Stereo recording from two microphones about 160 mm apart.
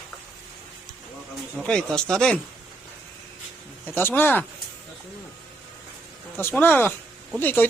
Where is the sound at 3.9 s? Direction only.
10° left (ahead or behind).